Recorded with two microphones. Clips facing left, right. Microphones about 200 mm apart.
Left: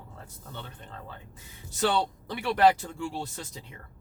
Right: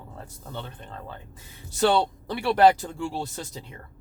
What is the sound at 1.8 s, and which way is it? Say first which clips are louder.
Speech: right 5 dB; 35° right (ahead or behind).